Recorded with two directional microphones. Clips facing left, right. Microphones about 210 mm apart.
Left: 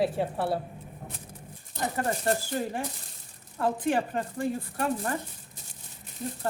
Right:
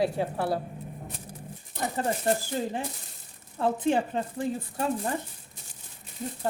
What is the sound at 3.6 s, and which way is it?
Speech, 20° right (ahead or behind).